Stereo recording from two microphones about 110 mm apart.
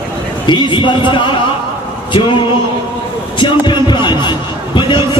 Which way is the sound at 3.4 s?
45° left (ahead or behind).